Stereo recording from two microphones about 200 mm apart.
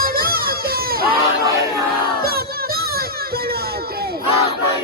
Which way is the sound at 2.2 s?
50° right (ahead or behind).